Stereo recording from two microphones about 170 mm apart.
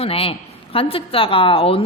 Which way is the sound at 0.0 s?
35° left (ahead or behind).